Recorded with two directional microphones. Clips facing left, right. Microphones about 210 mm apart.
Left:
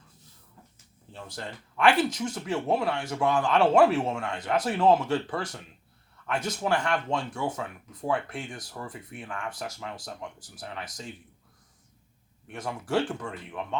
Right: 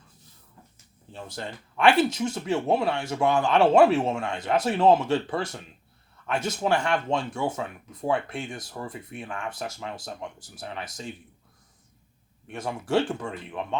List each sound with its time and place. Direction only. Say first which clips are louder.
1.1 s speech: right 3 dB; 25° right (ahead or behind)
12.5 s speech: right 3 dB; 25° right (ahead or behind)